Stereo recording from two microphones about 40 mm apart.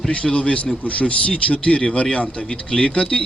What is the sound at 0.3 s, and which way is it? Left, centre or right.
Speech, left.